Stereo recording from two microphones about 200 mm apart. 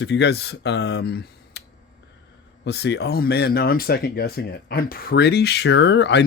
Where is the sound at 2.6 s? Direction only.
60° left (ahead or behind).